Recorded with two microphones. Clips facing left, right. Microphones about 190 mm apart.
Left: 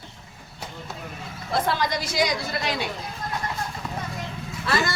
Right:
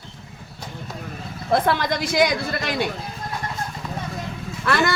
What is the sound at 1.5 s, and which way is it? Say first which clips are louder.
Speech: right 5 dB; 55° right (ahead or behind).